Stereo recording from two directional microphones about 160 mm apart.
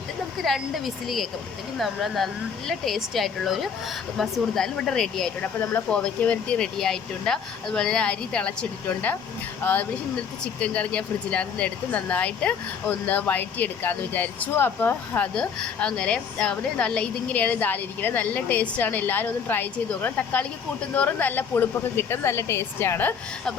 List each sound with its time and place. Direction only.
0.4 s speech: centre (ahead or behind)
9.6 s speech: 10° left (ahead or behind)